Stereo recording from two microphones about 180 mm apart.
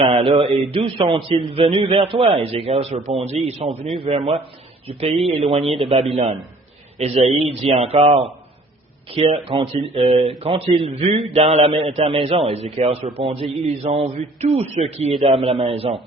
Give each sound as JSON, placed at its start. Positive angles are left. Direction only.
{"t": 0.0, "sound": "a man's voice", "side_deg": -30}